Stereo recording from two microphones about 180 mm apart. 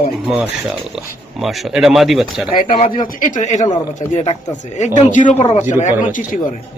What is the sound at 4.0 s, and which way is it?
A man's voice, 35° left (ahead or behind).